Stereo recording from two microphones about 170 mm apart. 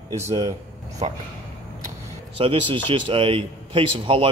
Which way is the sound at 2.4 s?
30° right (ahead or behind).